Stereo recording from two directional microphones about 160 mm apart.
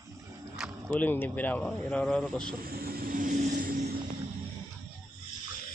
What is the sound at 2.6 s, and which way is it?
Vehicle, 65° right (ahead or behind).